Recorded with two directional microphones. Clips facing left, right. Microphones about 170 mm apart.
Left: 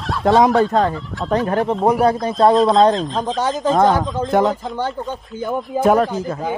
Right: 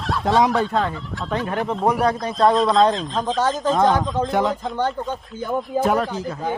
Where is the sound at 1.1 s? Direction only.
Centre (ahead or behind).